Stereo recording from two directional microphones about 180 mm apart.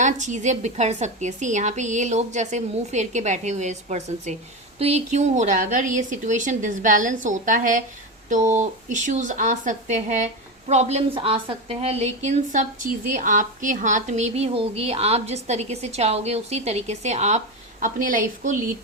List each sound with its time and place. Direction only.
0.0 s a woman's voice: 40° right (ahead or behind)